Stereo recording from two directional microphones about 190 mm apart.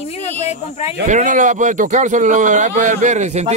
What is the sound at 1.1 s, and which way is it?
Speech, 40° right (ahead or behind).